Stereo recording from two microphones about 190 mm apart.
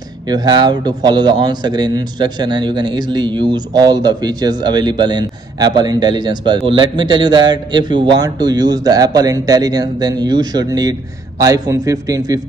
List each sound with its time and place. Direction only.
0.3 s speech: 20° right (ahead or behind)